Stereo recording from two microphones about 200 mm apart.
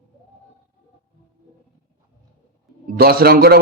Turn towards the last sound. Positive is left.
turn(degrees=-50)  # may be behind; listen again after turning